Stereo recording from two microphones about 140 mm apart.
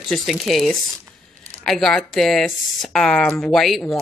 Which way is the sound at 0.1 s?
Centre (ahead or behind).